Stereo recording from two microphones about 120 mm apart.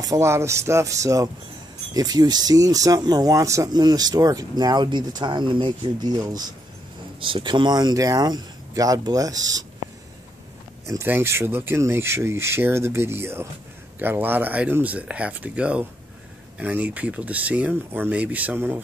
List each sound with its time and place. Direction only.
0.0 s speech: 25° right (ahead or behind)
7.2 s speech: 45° right (ahead or behind)
10.9 s speech: 20° right (ahead or behind)